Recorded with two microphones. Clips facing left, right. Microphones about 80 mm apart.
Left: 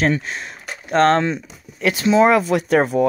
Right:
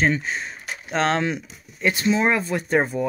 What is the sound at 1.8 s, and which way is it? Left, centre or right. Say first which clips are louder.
Speech: left 6 dB; left.